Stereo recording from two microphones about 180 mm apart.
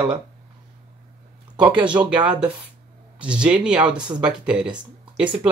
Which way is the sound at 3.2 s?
5° right (ahead or behind).